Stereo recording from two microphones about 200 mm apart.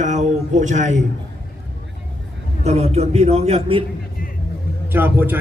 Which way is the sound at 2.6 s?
35° right (ahead or behind).